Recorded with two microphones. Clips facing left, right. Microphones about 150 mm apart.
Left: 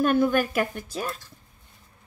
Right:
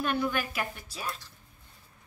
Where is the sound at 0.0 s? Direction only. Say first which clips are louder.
Left 9 dB; 45° left (ahead or behind).